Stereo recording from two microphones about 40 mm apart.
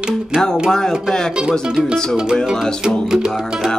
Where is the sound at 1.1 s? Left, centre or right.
Centre.